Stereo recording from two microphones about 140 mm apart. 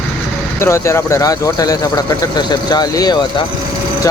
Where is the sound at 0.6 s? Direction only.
20° left (ahead or behind).